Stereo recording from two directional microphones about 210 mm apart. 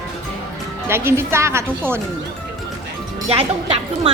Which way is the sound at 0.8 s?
10° right (ahead or behind).